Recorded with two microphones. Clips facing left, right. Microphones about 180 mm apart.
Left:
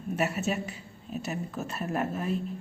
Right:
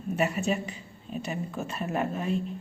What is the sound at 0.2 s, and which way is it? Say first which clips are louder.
A woman's voice: right 2 dB; 5° left (ahead or behind).